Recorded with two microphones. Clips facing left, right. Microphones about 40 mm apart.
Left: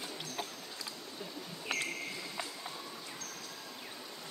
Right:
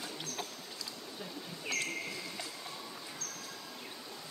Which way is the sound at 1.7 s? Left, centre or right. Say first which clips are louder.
Even; left.